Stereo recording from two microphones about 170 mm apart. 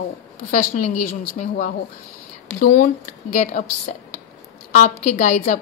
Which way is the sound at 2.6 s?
50° left (ahead or behind).